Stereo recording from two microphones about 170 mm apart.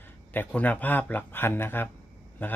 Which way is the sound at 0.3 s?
10° left (ahead or behind).